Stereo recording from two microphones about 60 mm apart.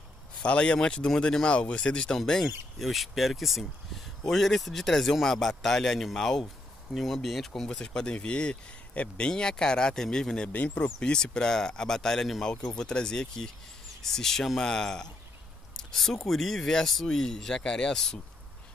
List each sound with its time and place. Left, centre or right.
0.4 s speech: centre
10.5 s speech: left
15.7 s a sound: centre
16.3 s speech: centre